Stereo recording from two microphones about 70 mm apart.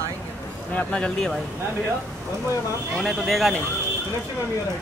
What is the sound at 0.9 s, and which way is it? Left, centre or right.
Speech, centre.